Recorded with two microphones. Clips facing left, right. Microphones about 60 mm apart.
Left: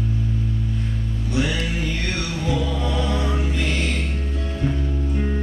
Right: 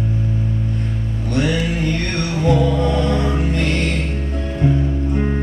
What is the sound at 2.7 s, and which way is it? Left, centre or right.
Music, centre.